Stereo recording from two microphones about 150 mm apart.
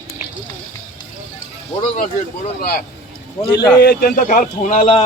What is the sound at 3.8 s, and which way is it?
Speech, 80° left.